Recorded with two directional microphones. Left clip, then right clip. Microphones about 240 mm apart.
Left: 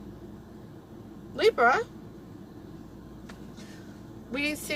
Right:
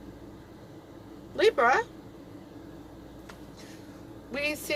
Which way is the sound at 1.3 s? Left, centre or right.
Right.